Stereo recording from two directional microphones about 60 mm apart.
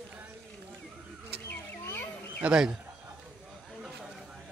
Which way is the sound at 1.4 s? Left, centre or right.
Left.